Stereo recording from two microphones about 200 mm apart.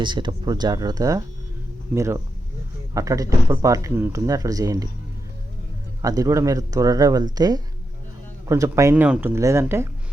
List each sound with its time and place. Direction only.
0.0 s speech: 25° right (ahead or behind)
6.0 s speech: 15° right (ahead or behind)